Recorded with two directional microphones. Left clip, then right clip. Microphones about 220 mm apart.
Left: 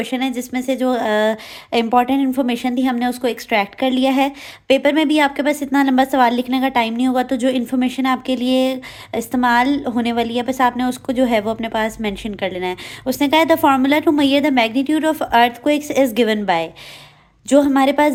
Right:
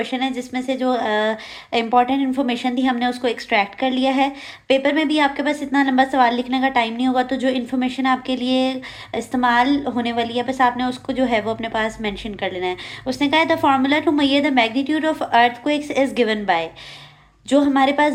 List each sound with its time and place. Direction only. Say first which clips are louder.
0.0 s a woman's voice: left 1 dB; 35° left (ahead or behind)